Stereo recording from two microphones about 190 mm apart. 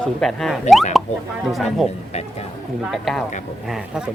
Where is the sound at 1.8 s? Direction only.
35° left (ahead or behind).